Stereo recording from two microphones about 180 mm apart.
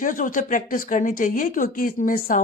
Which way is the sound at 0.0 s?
45° left (ahead or behind).